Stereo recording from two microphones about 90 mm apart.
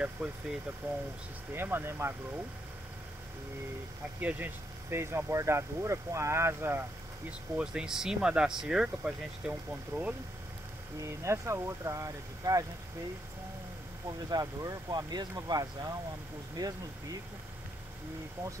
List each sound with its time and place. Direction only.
0.0 s speech: 10° right (ahead or behind)
1.5 s speech: 25° right (ahead or behind)
4.2 s speech: 20° right (ahead or behind)
7.2 s speech: 10° right (ahead or behind)
11.2 s speech: 30° right (ahead or behind)
14.0 s speech: 45° right (ahead or behind)